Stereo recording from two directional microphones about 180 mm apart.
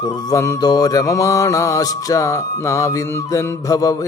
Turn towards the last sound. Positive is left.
turn(degrees=20)  # may be behind; listen again after turning